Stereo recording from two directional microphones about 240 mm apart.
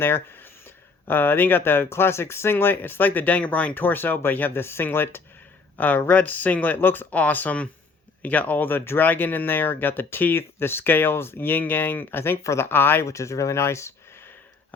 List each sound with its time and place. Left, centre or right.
0.0 s speech: centre